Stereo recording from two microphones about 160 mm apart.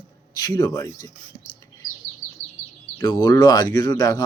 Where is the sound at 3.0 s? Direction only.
30° left (ahead or behind).